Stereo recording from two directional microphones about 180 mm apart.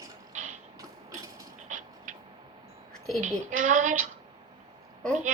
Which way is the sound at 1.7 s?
45° right (ahead or behind).